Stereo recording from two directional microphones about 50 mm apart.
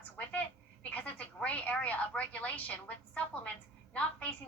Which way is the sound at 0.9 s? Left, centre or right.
Left.